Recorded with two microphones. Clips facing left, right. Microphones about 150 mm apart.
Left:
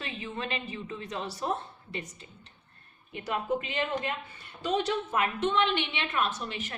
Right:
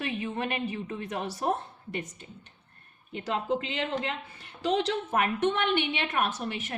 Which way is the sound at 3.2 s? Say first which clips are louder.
Right 1 dB; 75° right (ahead or behind).